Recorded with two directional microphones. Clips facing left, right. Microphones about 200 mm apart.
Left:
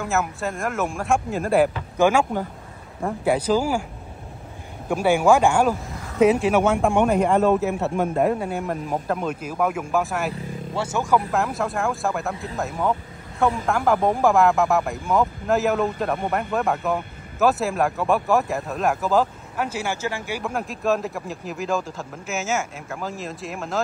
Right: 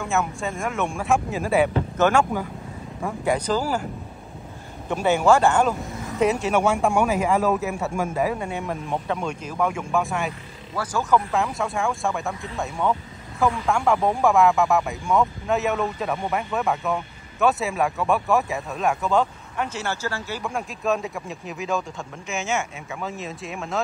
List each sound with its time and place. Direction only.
0.0 s speech: centre (ahead or behind)
2.0 s speech: 10° left (ahead or behind)
3.3 s speech: 10° left (ahead or behind)
4.8 s speech: 10° left (ahead or behind)
10.7 s speech: 25° left (ahead or behind)
11.1 s speech: 5° left (ahead or behind)
20.4 s speech: centre (ahead or behind)